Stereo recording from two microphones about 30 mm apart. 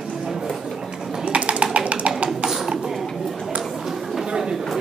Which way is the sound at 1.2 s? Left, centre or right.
Right.